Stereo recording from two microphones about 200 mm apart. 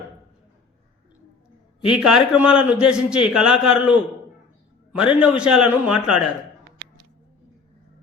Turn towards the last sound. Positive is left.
turn(degrees=-5)  # may be behind; listen again after turning